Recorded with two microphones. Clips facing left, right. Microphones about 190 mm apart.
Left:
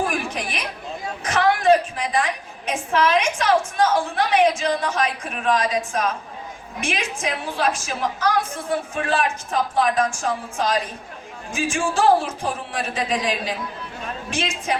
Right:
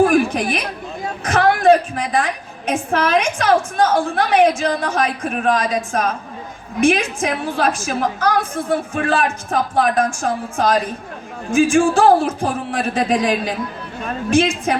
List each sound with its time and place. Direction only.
0.0 s chatter: 55° right (ahead or behind)
1.0 s a woman's voice: 55° right (ahead or behind)